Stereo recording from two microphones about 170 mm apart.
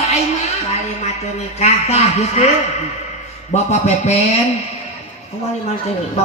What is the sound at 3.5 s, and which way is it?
Speech, 40° left (ahead or behind).